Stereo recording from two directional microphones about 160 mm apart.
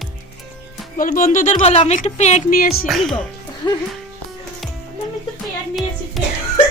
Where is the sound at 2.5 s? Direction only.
65° left (ahead or behind).